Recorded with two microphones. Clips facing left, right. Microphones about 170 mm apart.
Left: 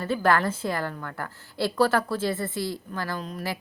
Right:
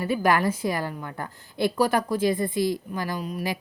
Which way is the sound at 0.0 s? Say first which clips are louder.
Right 1 dB; 15° right (ahead or behind).